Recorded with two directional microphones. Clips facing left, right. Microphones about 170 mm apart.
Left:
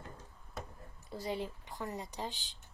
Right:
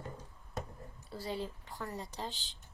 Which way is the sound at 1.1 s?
15° left (ahead or behind).